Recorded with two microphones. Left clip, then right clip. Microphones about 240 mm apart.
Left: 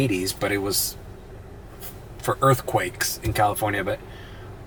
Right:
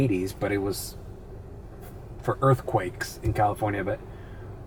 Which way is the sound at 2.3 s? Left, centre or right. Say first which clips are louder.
Left 3 dB; centre.